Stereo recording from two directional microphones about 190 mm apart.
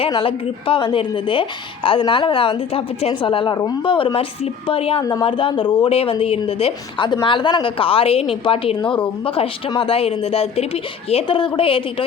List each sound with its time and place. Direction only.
0.0 s a woman's voice: 30° left (ahead or behind)